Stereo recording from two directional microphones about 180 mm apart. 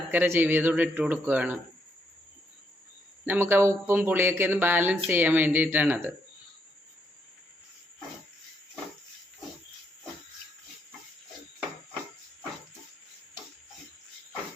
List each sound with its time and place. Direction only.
0.1 s speech: 10° right (ahead or behind)
3.2 s speech: 10° right (ahead or behind)